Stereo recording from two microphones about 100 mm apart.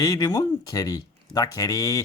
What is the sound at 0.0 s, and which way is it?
Speech, 40° left (ahead or behind).